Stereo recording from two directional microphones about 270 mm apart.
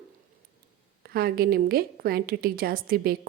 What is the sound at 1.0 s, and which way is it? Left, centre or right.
A woman's voice, right.